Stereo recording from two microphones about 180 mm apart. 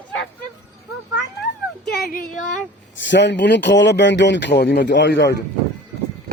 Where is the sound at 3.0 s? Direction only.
80° left.